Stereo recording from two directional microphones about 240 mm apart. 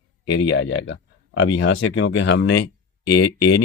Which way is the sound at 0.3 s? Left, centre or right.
Left.